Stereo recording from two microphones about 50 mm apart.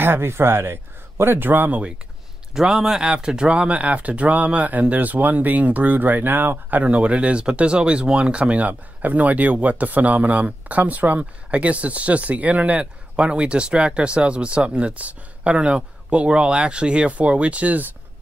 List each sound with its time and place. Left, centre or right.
0.0 s speech: right
1.7 s speech: right
6.8 s speech: right